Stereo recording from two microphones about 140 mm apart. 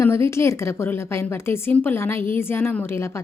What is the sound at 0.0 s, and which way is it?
A woman's voice, 20° left (ahead or behind).